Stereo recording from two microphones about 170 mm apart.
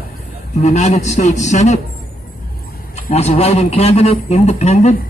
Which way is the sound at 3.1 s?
40° left (ahead or behind).